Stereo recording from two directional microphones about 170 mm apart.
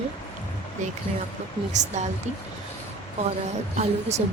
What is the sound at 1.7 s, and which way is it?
Speech, 45° right (ahead or behind).